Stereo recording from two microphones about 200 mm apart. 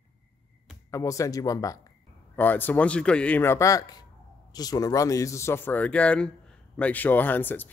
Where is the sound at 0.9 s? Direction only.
15° left (ahead or behind).